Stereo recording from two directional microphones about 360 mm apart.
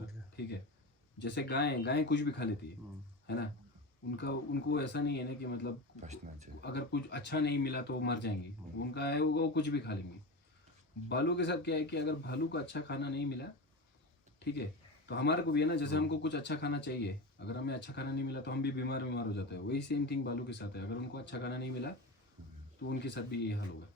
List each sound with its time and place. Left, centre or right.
1.2 s speech: left
4.2 s speech: left
6.0 s speech: centre
6.6 s speech: left
11.1 s speech: left
14.3 s a sound: left
15.0 s speech: left